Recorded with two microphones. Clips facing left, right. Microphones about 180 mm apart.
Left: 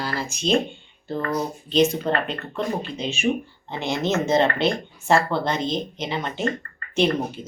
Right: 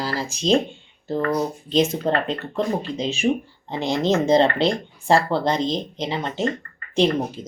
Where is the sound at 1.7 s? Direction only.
30° right (ahead or behind).